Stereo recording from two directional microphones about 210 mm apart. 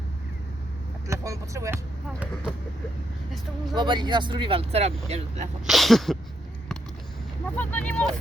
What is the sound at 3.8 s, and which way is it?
Speech, 20° right (ahead or behind).